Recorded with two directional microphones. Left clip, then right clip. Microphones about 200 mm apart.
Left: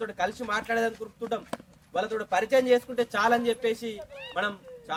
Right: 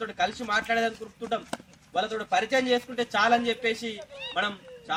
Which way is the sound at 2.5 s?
25° left (ahead or behind).